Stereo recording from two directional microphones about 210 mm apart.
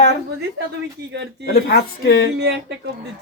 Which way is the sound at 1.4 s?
50° left (ahead or behind).